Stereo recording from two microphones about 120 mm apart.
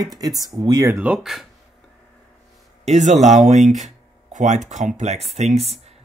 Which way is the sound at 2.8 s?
75° right (ahead or behind).